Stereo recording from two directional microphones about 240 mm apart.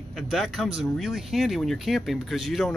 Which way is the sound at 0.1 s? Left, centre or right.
Centre.